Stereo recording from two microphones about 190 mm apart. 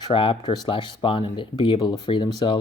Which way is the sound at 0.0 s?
25° left (ahead or behind).